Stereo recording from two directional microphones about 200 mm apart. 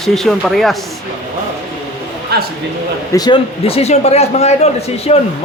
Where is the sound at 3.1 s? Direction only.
20° left (ahead or behind).